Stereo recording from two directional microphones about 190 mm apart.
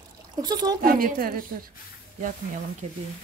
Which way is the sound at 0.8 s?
50° right (ahead or behind).